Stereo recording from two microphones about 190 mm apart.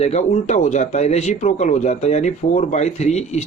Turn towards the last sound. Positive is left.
turn(degrees=35)  # may be behind; listen again after turning